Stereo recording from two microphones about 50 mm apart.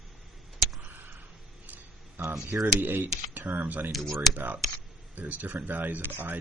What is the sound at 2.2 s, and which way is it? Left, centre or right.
Speech, right.